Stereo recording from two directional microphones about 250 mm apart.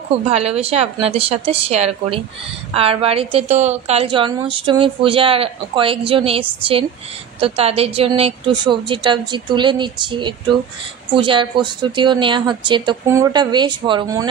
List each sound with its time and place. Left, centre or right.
0.3 s a woman's voice: right